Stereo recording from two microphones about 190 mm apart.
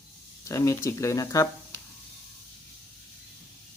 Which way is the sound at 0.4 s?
15° left (ahead or behind).